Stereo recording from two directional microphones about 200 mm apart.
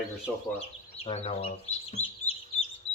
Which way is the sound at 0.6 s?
30° left (ahead or behind).